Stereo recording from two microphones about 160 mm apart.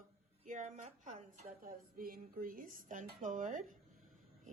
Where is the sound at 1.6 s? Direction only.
65° right (ahead or behind).